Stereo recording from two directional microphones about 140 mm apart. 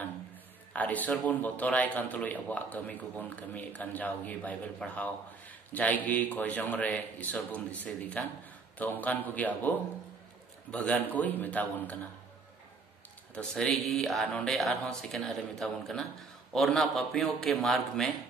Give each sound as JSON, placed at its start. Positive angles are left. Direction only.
{"t": 0.7, "sound": "a man's voice", "side_deg": 10}
{"t": 13.3, "sound": "speech", "side_deg": 5}